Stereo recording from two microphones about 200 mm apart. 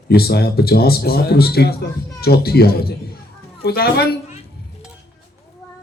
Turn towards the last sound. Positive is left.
turn(degrees=50)  # may be behind; listen again after turning